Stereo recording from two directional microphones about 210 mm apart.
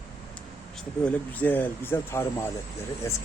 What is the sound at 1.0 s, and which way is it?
Speech, 5° left (ahead or behind).